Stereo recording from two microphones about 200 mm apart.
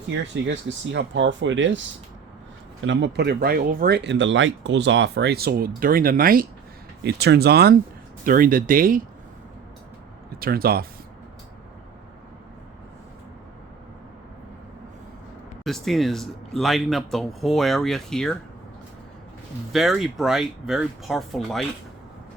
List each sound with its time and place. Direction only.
0.1 s speech: 65° right (ahead or behind); by 6.5 s 45° right (ahead or behind)
7.0 s speech: 55° right (ahead or behind)
10.4 s speech: 50° right (ahead or behind)
15.6 s speech: centre (ahead or behind)
19.7 s speech: centre (ahead or behind)